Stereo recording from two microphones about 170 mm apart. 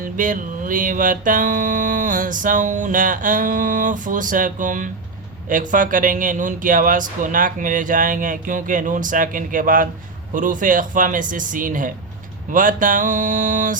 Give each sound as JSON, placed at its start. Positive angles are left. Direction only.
{"t": 0.0, "sound": "music", "side_deg": -50}